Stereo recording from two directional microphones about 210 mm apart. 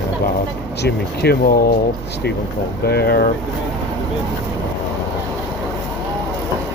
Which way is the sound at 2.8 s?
50° left (ahead or behind).